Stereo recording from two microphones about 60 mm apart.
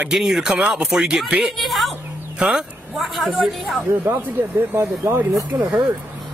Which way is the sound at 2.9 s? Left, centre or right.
Centre.